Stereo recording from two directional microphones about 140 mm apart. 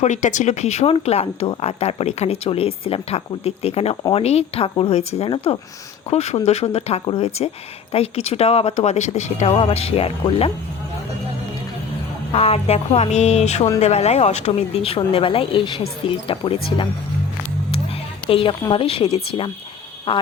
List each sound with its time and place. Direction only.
0.0 s speech: 60° left (ahead or behind); by 10.5 s 45° left (ahead or behind)
12.3 s speech: 45° left (ahead or behind)
18.3 s speech: 40° left (ahead or behind)